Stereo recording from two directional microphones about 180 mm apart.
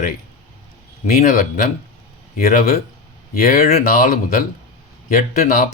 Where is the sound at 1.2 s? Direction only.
50° left (ahead or behind).